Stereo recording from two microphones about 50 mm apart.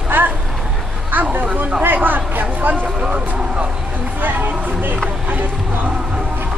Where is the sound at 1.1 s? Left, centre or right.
Right.